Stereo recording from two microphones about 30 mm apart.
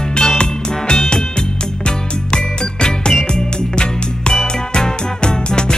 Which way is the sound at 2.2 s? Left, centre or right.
Left.